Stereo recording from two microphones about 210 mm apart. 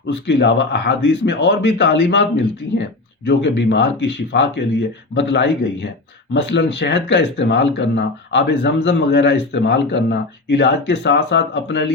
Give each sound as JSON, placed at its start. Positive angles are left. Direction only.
{"t": 0.1, "sound": "speech", "side_deg": 55}